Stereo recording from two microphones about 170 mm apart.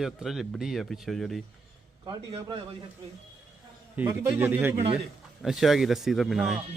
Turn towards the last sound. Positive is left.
turn(degrees=0)  # may be behind; listen again after turning